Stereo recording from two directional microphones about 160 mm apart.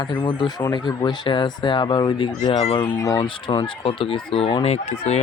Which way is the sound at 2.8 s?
20° left (ahead or behind).